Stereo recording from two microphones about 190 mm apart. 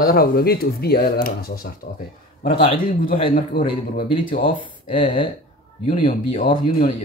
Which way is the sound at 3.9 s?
45° left (ahead or behind).